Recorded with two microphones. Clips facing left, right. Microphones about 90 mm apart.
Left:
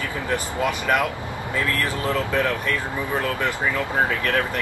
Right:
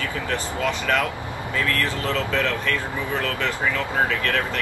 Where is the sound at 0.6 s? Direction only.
15° left (ahead or behind).